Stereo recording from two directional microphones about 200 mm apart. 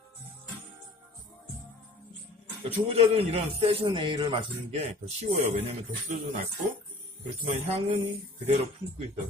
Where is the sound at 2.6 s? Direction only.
30° right (ahead or behind).